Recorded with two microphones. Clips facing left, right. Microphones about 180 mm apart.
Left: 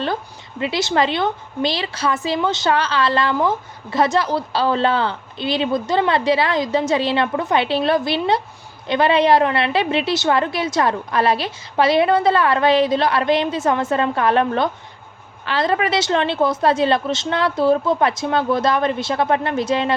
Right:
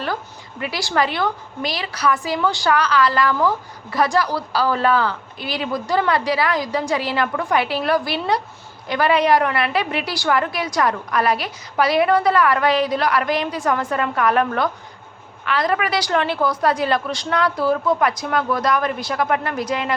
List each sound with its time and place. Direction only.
0.6 s a woman's voice: 25° left (ahead or behind)